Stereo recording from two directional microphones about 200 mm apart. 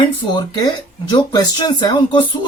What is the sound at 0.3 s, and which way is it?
Speech, 20° left (ahead or behind).